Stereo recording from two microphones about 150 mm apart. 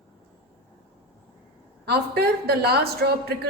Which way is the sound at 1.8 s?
90° right.